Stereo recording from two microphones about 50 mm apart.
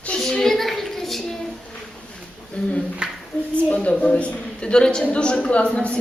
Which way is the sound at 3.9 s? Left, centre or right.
Left.